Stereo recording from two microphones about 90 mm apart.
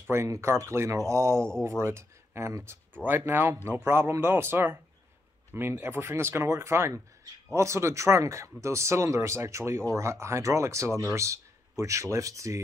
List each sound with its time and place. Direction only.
0.1 s speech: 30° right (ahead or behind)